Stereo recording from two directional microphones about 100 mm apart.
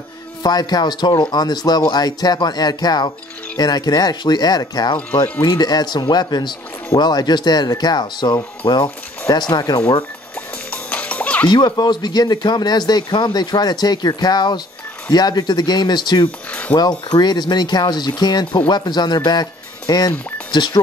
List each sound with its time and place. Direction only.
0.4 s speech: 45° left (ahead or behind)
4.9 s speech: 20° left (ahead or behind)
5.4 s speech: 45° left (ahead or behind)
10.7 s music: 15° left (ahead or behind)
11.4 s speech: 45° left (ahead or behind)